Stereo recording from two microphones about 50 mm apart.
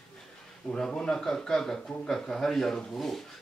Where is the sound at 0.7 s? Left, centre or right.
Centre.